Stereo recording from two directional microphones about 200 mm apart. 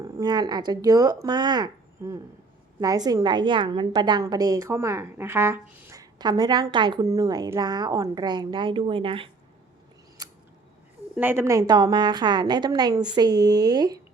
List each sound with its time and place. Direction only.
0.0 s a woman's voice: 20° right (ahead or behind)
10.2 s scissors: 20° right (ahead or behind)
11.2 s a woman's voice: 10° right (ahead or behind)